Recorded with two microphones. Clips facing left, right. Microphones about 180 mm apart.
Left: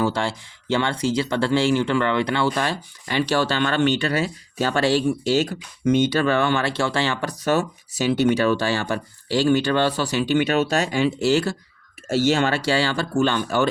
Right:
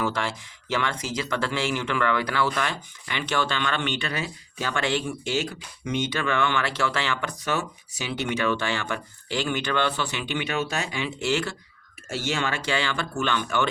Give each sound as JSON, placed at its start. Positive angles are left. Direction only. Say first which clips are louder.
{"t": 0.0, "sound": "speech", "louder": "left 5 dB", "side_deg": 30}